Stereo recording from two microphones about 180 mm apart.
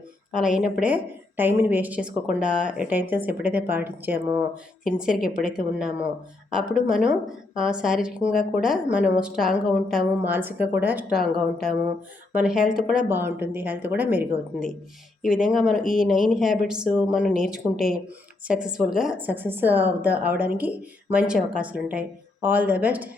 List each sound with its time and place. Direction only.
0.3 s a woman's voice: 5° right (ahead or behind)
12.3 s a woman's voice: 5° right (ahead or behind)